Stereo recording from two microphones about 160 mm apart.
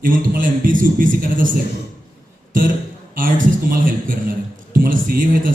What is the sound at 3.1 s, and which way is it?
Speech, 60° right (ahead or behind).